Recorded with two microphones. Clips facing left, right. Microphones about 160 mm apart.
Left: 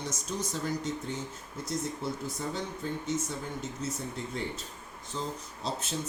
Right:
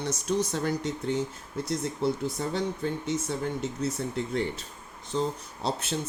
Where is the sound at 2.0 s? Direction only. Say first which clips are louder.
Right 6 dB; 75° right (ahead or behind).